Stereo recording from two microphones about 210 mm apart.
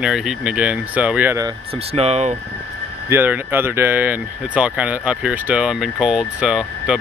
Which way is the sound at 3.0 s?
10° right (ahead or behind).